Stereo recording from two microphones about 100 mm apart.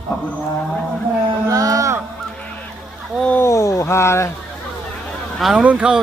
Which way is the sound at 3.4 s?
30° left (ahead or behind).